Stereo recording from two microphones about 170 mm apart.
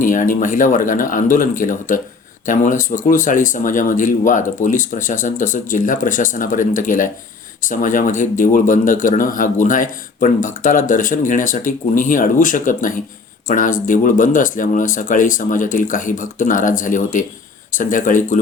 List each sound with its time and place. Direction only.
0.0 s speech: 50° left (ahead or behind)